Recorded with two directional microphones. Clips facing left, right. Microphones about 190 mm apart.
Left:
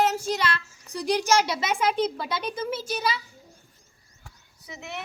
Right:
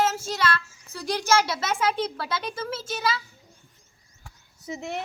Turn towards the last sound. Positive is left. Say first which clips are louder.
# right 5 dB
turn(degrees=-50)  # may be behind; listen again after turning